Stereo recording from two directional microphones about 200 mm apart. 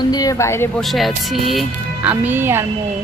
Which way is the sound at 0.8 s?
Centre (ahead or behind).